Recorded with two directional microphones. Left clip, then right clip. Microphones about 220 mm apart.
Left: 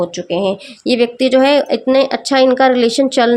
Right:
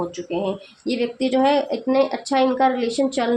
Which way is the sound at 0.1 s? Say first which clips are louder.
Left 8 dB; 50° left (ahead or behind).